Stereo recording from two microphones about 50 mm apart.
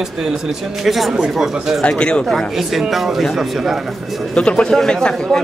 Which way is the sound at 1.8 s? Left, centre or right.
Centre.